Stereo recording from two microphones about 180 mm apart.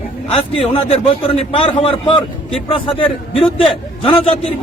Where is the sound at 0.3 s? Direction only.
30° left (ahead or behind).